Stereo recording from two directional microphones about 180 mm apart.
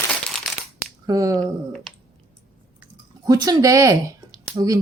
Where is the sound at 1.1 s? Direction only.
20° right (ahead or behind).